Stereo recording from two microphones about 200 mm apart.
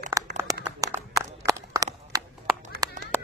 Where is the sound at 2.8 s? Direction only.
20° right (ahead or behind).